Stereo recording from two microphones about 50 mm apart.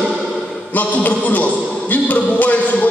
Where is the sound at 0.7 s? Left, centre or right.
Left.